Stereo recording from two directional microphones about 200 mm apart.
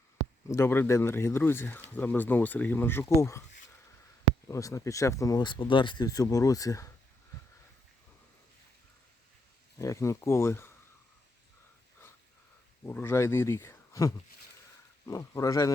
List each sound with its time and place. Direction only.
0.4 s speech: 15° left (ahead or behind)
4.4 s speech: 15° left (ahead or behind)
9.7 s speech: 15° left (ahead or behind)
12.8 s speech: 10° left (ahead or behind)